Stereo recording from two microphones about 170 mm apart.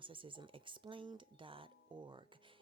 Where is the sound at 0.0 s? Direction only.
30° right (ahead or behind).